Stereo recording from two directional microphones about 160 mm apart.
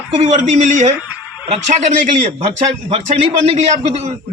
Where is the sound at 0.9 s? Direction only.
10° right (ahead or behind).